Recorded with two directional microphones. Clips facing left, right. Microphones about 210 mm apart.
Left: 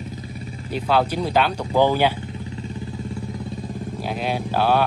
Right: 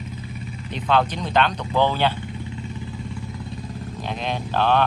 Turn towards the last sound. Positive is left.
turn(degrees=10)  # may be behind; listen again after turning